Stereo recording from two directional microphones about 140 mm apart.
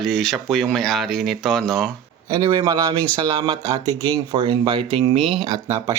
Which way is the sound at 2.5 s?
30° right (ahead or behind).